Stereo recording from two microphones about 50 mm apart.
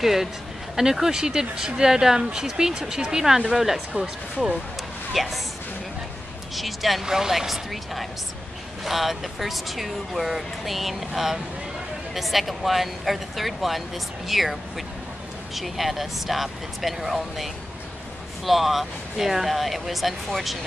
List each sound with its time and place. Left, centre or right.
0.0 s speech: centre
3.9 s speech: right
5.1 s speech: centre
6.5 s speech: centre